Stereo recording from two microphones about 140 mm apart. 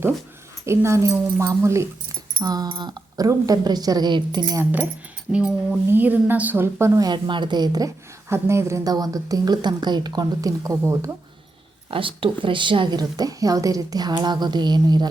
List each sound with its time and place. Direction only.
0.6 s speech: 20° right (ahead or behind)
5.3 s speech: 10° right (ahead or behind)
11.9 s a woman's voice: 40° right (ahead or behind)